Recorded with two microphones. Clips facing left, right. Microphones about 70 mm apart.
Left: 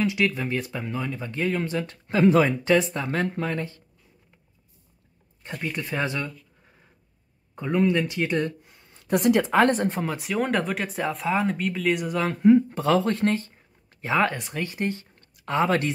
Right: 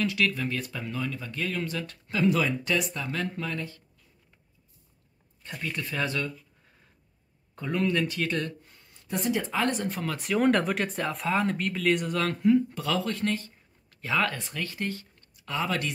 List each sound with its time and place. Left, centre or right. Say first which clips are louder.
0.0 s speech: left 3 dB; left
5.6 s speech: left 3 dB; left
7.5 s speech: left 5 dB; centre
9.0 s speech: left 8 dB; left
9.6 s speech: left 8 dB; left
9.8 s speech: left 5 dB; left
10.1 s speech: right 6 dB; centre
12.4 s speech: left 7 dB; left
15.1 s a sound: left 11 dB; left